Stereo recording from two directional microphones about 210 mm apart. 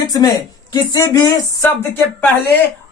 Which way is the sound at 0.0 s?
15° left (ahead or behind).